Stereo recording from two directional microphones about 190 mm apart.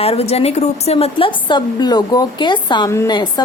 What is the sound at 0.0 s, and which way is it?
A woman's voice, 30° left (ahead or behind).